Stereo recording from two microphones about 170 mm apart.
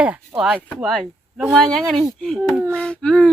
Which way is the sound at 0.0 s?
5° right (ahead or behind).